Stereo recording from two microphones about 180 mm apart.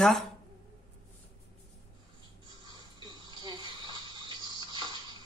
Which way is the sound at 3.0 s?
25° right (ahead or behind).